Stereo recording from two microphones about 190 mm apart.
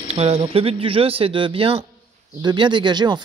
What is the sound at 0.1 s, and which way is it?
Speech, 35° right (ahead or behind).